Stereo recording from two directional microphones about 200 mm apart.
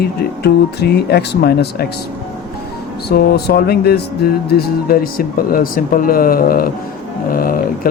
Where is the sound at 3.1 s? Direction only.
50° left (ahead or behind).